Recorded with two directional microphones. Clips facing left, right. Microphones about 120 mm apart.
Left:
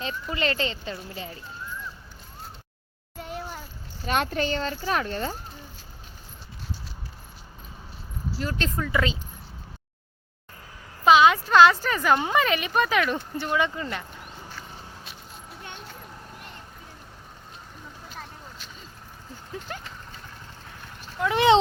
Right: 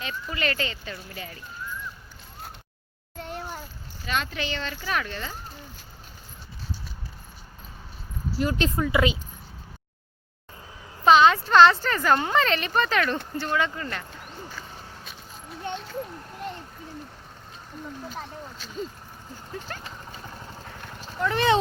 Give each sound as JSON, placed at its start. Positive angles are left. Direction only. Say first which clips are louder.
{"t": 0.0, "sound": "speech", "louder": "left 2 dB", "side_deg": 25}
{"t": 3.2, "sound": "a sound", "louder": "even", "side_deg": 0}
{"t": 4.0, "sound": "speech", "louder": "left 4 dB", "side_deg": 50}
{"t": 8.4, "sound": "speech", "louder": "right 5 dB", "side_deg": -15}
{"t": 11.0, "sound": "a sound", "louder": "even", "side_deg": 5}
{"t": 11.4, "sound": "speech", "louder": "even", "side_deg": 5}
{"t": 19.7, "sound": "speech", "louder": "left 1 dB", "side_deg": 15}
{"t": 21.2, "sound": "speech", "louder": "left 3 dB", "side_deg": 15}